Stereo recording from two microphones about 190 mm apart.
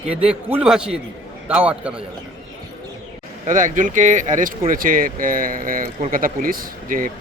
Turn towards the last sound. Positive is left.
turn(degrees=-45)  # may be behind; listen again after turning